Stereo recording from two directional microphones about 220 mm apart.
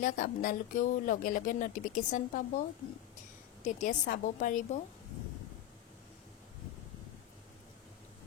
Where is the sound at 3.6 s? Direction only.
35° left (ahead or behind).